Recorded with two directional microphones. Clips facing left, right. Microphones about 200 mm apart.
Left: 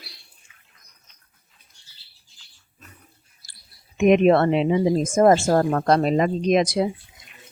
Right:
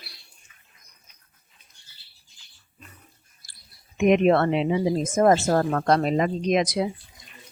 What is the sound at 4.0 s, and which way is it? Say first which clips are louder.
Speech: left 3 dB; 35° left (ahead or behind).